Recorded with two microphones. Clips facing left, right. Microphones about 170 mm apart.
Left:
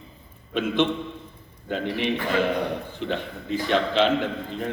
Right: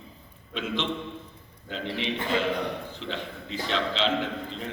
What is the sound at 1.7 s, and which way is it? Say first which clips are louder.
A man's voice: left 5 dB; 55° left (ahead or behind).